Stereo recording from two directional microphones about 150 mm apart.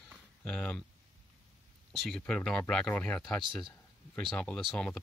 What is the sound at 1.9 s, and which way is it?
Speech, centre (ahead or behind).